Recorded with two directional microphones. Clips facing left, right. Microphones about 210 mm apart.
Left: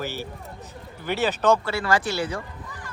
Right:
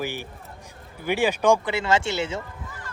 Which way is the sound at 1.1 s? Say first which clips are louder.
Right 1 dB; 10° right (ahead or behind).